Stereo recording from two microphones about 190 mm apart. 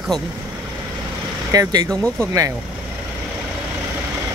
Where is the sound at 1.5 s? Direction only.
20° right (ahead or behind).